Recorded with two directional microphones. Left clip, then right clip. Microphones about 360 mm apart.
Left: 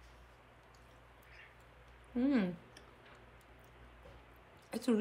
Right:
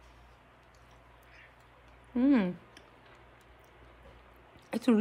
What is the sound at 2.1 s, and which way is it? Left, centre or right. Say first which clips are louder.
Speech: right 7 dB; centre.